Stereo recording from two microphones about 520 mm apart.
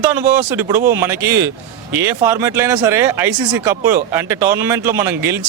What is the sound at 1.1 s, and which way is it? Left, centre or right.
Speech, right.